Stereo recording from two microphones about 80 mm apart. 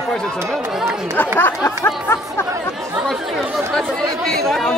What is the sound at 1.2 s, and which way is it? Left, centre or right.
Speech, left.